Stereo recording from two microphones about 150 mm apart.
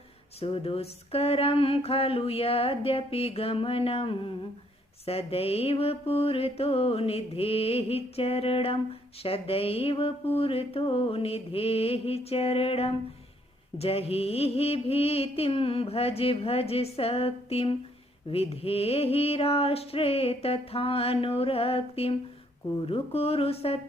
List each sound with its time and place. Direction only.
0.3 s mantra: 40° left (ahead or behind)